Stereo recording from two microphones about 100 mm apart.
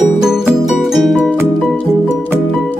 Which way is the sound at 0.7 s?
Centre (ahead or behind).